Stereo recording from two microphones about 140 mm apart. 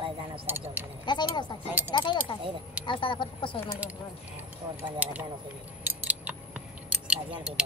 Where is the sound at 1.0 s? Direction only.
30° left (ahead or behind).